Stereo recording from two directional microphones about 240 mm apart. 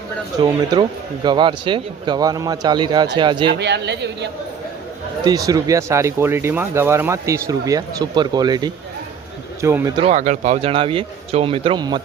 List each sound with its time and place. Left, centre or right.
0.3 s speech: centre
3.6 s speech: right
5.2 s speech: centre
10.0 s speech: right